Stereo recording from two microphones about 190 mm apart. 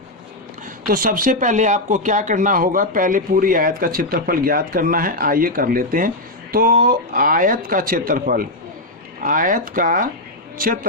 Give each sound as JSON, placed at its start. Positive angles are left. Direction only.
{"t": 0.9, "sound": "speech", "side_deg": -45}